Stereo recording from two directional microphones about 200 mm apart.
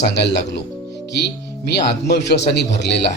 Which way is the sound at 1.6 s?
55° left (ahead or behind).